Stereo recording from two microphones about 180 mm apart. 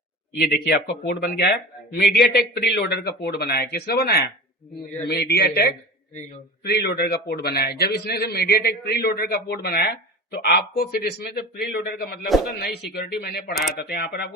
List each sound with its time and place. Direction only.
0.3 s a man's voice: 60° left (ahead or behind)